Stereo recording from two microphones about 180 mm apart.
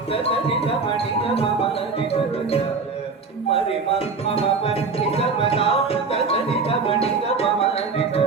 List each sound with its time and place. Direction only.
0.1 s speech: 30° left (ahead or behind)
3.5 s music: 30° left (ahead or behind)